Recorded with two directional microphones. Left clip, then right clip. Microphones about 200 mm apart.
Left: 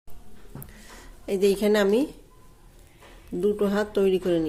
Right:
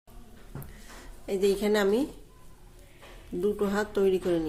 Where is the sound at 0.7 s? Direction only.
25° left (ahead or behind).